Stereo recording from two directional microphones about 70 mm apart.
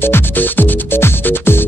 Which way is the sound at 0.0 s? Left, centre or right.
Left.